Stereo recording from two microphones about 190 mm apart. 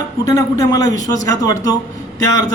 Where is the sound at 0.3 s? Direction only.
15° left (ahead or behind).